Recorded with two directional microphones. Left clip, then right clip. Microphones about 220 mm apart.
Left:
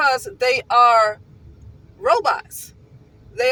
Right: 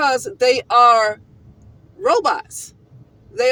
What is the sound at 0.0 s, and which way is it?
Speech, 30° right (ahead or behind).